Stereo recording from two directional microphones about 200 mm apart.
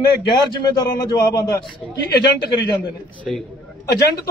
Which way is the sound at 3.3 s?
Centre (ahead or behind).